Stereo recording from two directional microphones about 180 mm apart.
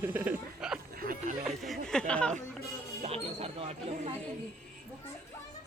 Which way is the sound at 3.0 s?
35° right (ahead or behind).